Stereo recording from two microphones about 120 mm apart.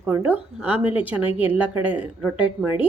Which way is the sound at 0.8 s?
45° left (ahead or behind).